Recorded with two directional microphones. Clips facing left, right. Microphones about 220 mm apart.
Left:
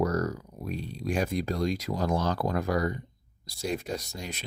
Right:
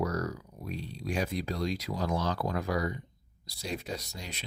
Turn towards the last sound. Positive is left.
turn(degrees=45)  # may be behind; listen again after turning